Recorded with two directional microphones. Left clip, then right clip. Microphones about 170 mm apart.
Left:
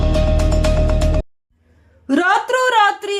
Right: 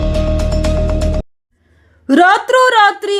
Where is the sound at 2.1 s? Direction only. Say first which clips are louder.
Right 6 dB; 30° right (ahead or behind).